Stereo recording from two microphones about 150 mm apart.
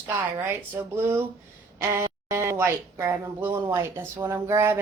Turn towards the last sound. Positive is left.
turn(degrees=-15)  # may be behind; listen again after turning